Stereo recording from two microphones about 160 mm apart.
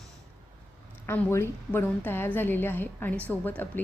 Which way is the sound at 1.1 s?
15° left (ahead or behind).